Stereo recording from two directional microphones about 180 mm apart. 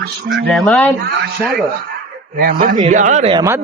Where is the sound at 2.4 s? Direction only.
55° right (ahead or behind).